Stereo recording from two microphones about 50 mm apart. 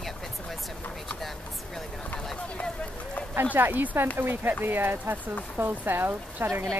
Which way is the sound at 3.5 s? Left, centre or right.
Right.